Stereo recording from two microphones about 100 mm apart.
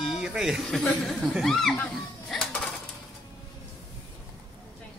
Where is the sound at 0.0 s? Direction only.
5° right (ahead or behind).